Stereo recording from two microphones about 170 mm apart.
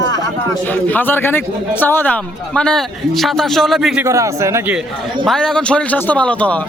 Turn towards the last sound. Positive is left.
turn(degrees=5)  # may be behind; listen again after turning